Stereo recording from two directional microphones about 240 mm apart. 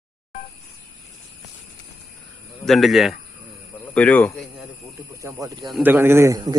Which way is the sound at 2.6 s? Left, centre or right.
Centre.